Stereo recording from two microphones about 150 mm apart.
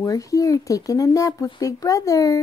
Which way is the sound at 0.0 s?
20° left (ahead or behind).